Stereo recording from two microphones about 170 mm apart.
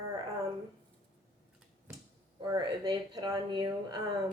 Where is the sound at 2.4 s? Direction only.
25° right (ahead or behind).